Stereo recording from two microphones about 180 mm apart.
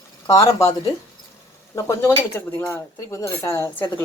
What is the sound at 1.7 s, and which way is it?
Speech, 15° left (ahead or behind).